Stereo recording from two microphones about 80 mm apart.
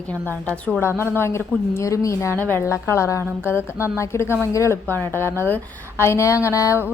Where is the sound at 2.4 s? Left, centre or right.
Left.